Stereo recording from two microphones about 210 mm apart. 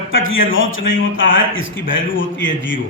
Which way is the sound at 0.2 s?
70° left (ahead or behind).